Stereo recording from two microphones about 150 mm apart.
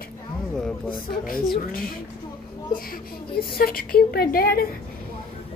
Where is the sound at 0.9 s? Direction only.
70° left (ahead or behind).